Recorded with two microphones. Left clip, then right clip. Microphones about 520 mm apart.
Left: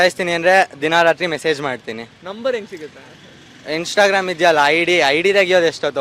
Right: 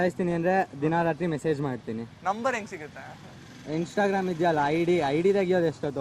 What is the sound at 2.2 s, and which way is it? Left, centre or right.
Speech, right.